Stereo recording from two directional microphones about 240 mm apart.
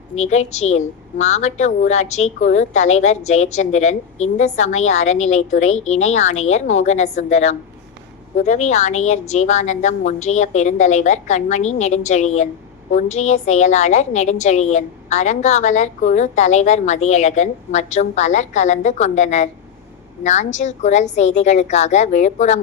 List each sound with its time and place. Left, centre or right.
0.2 s a woman's voice: left
5.1 s speech: left
6.4 s a woman's voice: left